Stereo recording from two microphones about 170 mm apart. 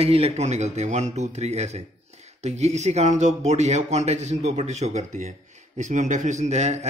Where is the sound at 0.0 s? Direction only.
35° right (ahead or behind).